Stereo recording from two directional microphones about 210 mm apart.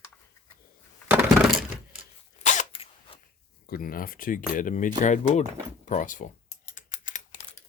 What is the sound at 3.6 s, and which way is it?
Speech, 45° left (ahead or behind).